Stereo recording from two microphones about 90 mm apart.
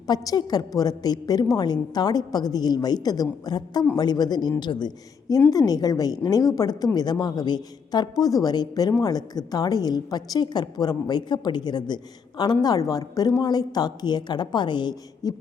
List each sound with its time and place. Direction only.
0.1 s a woman's voice: 50° left (ahead or behind)
5.5 s a woman's voice: 45° left (ahead or behind)